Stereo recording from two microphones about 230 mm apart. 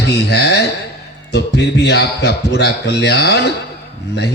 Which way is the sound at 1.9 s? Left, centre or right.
Left.